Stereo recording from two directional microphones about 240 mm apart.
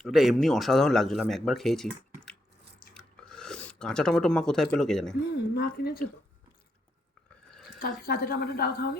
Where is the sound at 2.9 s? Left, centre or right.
Centre.